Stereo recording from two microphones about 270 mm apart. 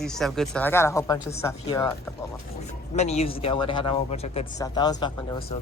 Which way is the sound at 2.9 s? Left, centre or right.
Left.